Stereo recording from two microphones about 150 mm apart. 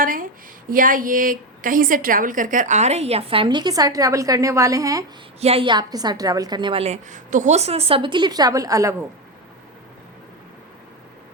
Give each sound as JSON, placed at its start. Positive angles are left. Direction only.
{"t": 0.0, "sound": "a woman's voice", "side_deg": -65}
{"t": 5.4, "sound": "a woman's voice", "side_deg": -40}